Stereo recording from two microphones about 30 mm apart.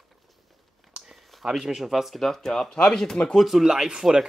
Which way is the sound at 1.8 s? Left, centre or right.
Centre.